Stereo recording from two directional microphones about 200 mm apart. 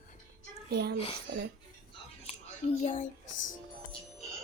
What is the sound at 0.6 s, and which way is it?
Speech, 50° right (ahead or behind).